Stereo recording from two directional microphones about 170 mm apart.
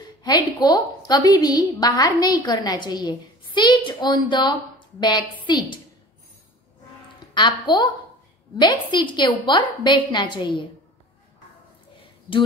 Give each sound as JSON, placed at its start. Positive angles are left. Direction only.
{"t": 0.0, "sound": "a woman's voice", "side_deg": 25}
{"t": 7.3, "sound": "a woman's voice", "side_deg": 25}